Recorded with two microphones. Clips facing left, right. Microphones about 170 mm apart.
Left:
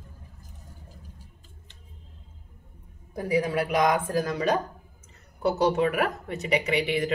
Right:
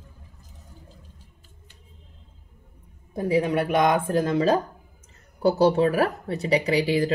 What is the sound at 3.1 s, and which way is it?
Speech, 25° right (ahead or behind).